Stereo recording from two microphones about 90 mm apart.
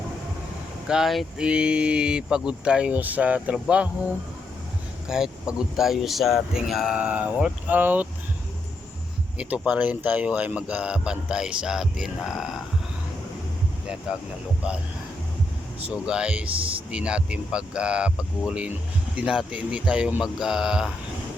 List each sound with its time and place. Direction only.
0.9 s speech: 5° right (ahead or behind)
5.0 s speech: 5° right (ahead or behind)
6.9 s speech: 15° right (ahead or behind)
9.4 s speech: 15° right (ahead or behind)
15.9 s speech: 10° right (ahead or behind)